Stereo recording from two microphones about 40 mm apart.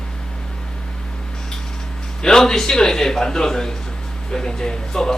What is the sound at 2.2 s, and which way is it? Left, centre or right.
Speech, centre.